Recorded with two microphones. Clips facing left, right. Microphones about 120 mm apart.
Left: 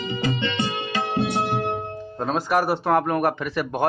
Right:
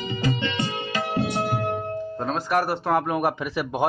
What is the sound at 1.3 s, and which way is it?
Music, 30° left (ahead or behind).